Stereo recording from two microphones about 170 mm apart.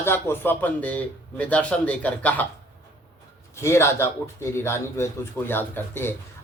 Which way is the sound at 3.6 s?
15° left (ahead or behind).